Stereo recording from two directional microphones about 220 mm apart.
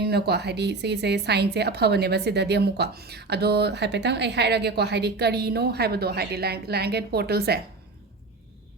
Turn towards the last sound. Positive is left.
turn(degrees=-45)  # may be behind; listen again after turning